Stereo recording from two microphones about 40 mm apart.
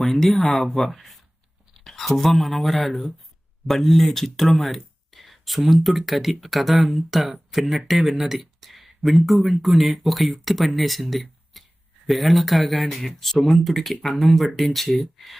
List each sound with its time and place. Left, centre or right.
0.0 s speech: centre